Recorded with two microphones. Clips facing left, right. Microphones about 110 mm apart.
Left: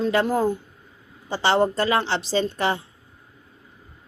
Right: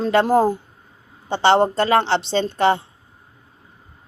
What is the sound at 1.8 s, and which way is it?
A woman's voice, 35° right (ahead or behind).